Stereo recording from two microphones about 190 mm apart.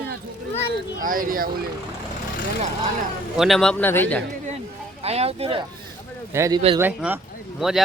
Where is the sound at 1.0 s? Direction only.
45° right (ahead or behind).